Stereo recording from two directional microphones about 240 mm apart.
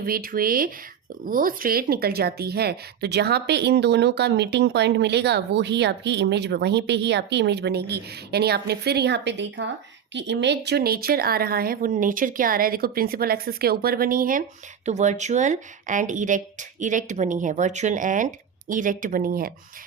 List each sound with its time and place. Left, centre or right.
0.0 s speech: right